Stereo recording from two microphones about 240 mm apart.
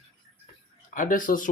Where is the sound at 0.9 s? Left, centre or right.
Left.